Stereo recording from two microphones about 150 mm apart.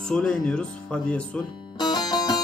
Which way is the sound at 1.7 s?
25° left (ahead or behind).